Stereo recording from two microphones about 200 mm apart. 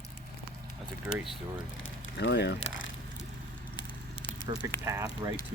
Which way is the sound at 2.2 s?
60° left (ahead or behind).